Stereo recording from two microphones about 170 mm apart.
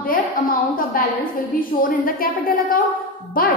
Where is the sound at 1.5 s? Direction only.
55° left (ahead or behind).